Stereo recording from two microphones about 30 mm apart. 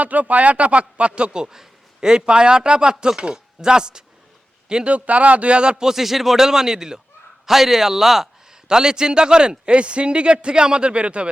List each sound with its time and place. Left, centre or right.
0.0 s speech: right
4.9 s speech: right
5.8 s a man's voice: centre
8.4 s a man's voice: right
9.7 s a man's voice: right